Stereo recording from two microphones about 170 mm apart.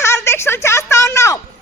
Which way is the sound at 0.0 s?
15° left (ahead or behind).